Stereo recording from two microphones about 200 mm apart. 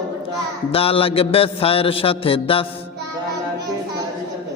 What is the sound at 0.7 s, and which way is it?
Mantra, 30° left (ahead or behind).